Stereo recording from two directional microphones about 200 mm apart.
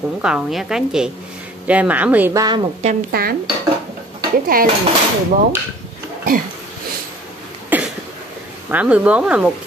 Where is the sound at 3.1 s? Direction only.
50° right (ahead or behind).